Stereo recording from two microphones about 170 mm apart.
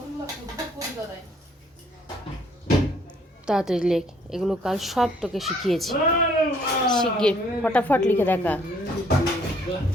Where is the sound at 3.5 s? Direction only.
5° right (ahead or behind).